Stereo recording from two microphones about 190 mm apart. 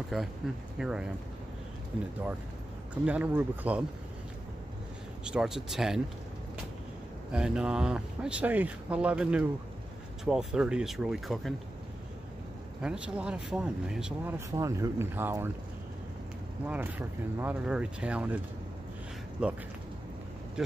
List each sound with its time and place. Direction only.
0.1 s speech: centre (ahead or behind)
2.9 s speech: 5° right (ahead or behind)
5.2 s speech: 5° right (ahead or behind)
7.3 s speech: 5° right (ahead or behind)
12.8 s speech: 5° right (ahead or behind)
14.5 s speech: 15° right (ahead or behind)
16.6 s speech: 10° right (ahead or behind)
20.6 s speech: 5° right (ahead or behind)